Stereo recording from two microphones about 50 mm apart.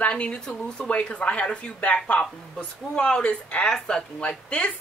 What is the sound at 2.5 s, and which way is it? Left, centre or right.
Speech, centre.